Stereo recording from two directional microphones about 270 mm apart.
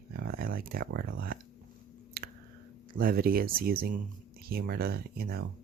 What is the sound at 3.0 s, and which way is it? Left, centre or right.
Speech, right.